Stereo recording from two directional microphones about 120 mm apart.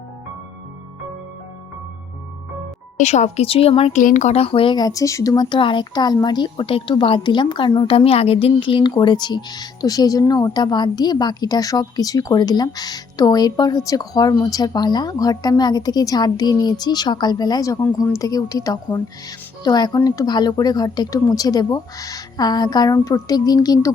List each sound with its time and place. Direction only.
3.0 s a woman's voice: 75° left (ahead or behind); by 3.9 s 55° left (ahead or behind)
3.9 s speech: 90° left
4.4 s speech: 50° left (ahead or behind)
4.8 s speech: 30° left (ahead or behind)
7.9 s speech: 55° left (ahead or behind); by 23.9 s 30° left (ahead or behind)